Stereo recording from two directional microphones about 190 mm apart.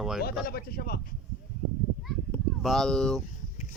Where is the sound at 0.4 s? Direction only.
55° left (ahead or behind).